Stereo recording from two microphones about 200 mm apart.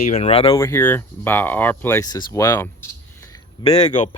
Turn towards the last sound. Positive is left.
turn(degrees=20)  # may be behind; listen again after turning